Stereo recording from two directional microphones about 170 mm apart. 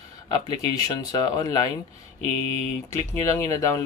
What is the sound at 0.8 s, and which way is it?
Speech, 20° left (ahead or behind).